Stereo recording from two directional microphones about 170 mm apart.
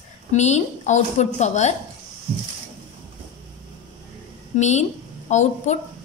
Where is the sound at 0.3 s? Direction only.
45° left (ahead or behind).